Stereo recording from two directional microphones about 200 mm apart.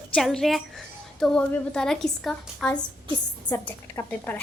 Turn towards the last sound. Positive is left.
turn(degrees=10)  # may be behind; listen again after turning